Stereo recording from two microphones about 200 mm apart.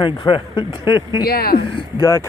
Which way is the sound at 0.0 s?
20° left (ahead or behind).